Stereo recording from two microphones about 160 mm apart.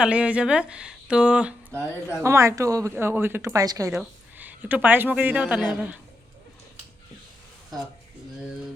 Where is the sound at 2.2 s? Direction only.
20° right (ahead or behind).